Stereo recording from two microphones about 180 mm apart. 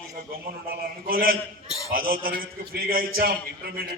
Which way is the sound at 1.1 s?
55° right (ahead or behind).